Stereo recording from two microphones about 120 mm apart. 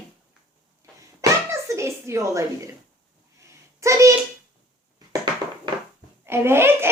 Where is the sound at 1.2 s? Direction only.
25° right (ahead or behind).